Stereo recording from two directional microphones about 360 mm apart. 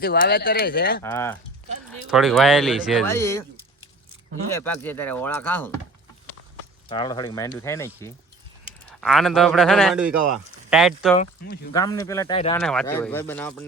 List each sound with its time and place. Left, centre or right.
0.0 s speech: left
1.0 s speech: centre
4.5 s speech: centre
6.8 s speech: centre
11.2 s speech: left
11.7 s speech: centre